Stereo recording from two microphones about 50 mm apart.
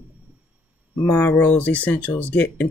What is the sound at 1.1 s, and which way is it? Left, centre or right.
Speech, left.